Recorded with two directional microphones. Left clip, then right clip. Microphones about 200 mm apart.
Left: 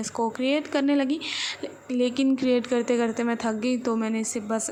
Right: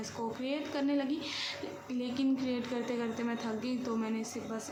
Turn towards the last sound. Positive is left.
turn(degrees=40)  # may be behind; listen again after turning